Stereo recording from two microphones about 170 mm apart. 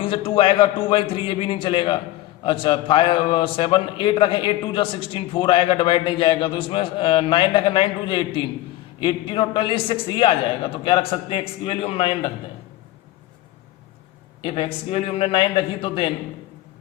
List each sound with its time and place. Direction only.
0.0 s a man's voice: 30° left (ahead or behind)
14.4 s a man's voice: 30° left (ahead or behind)